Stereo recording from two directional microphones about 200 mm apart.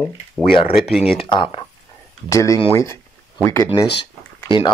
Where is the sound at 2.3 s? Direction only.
15° left (ahead or behind).